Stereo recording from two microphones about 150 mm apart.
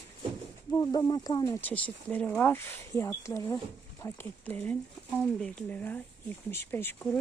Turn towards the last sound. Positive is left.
turn(degrees=15)  # may be behind; listen again after turning